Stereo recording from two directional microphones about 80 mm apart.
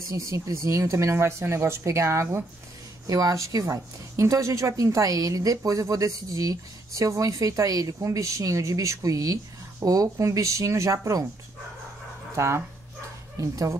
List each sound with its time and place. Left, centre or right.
0.1 s speech: right
12.4 s speech: right